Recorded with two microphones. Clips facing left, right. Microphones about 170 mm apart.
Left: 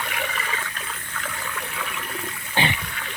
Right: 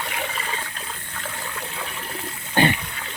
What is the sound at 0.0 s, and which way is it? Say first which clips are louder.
Water: even; 25° right (ahead or behind).